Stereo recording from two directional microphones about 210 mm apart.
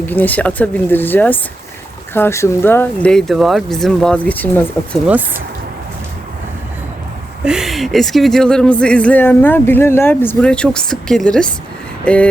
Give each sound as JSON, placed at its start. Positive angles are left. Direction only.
{"t": 0.0, "sound": "speech", "side_deg": 10}
{"t": 7.4, "sound": "speech", "side_deg": 0}